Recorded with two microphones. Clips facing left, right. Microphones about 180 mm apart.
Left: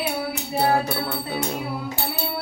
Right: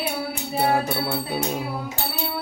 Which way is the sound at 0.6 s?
Centre (ahead or behind).